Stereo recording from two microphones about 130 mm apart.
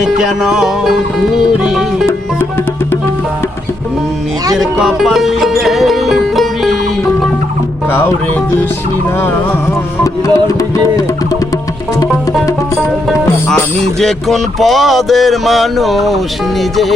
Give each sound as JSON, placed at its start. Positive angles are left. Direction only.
{"t": 0.0, "sound": "music", "side_deg": 0}
{"t": 4.5, "sound": "music", "side_deg": 0}
{"t": 10.0, "sound": "music", "side_deg": 25}
{"t": 14.0, "sound": "music", "side_deg": 0}